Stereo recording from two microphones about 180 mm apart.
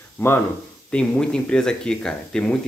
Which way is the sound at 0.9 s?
5° left (ahead or behind).